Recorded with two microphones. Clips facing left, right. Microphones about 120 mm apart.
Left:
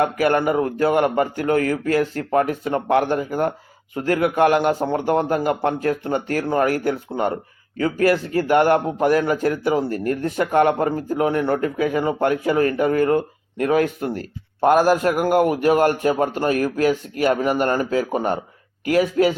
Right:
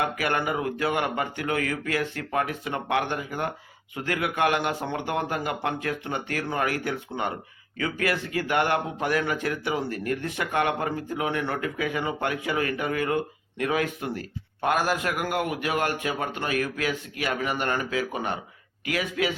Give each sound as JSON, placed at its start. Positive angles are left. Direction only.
{"t": 0.0, "sound": "speech", "side_deg": 40}